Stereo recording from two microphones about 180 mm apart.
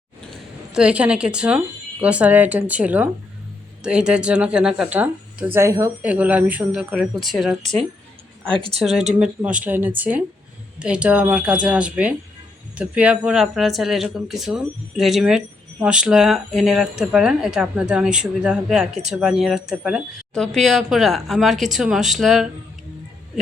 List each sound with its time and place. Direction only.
0.7 s speech: 5° right (ahead or behind)
7.6 s a woman's voice: 40° right (ahead or behind)
8.8 s speech: centre (ahead or behind)